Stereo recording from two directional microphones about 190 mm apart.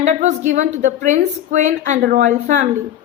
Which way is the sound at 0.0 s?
40° right (ahead or behind).